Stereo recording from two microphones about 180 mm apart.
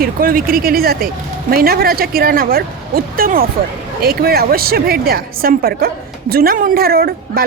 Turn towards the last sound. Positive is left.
turn(degrees=-55)  # may be behind; listen again after turning